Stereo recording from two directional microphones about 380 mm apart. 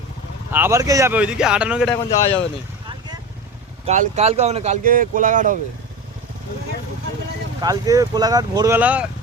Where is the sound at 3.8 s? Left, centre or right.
Centre.